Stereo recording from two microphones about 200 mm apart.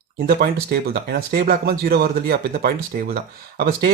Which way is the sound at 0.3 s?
50° right (ahead or behind).